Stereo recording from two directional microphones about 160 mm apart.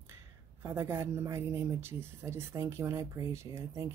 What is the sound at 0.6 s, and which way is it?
Speech, 15° right (ahead or behind).